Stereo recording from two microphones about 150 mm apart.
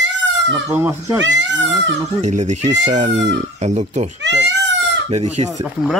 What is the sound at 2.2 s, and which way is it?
Speech, 50° right (ahead or behind).